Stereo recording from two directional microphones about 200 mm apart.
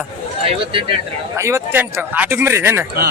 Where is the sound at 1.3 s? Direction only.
15° right (ahead or behind).